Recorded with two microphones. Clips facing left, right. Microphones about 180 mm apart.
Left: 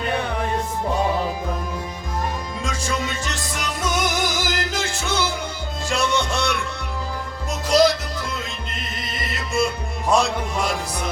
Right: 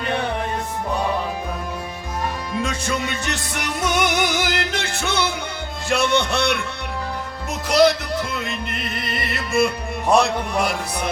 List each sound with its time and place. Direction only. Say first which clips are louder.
3.2 s music: right 2 dB; 65° right (ahead or behind)
7.7 s music: right 1 dB; 65° right (ahead or behind)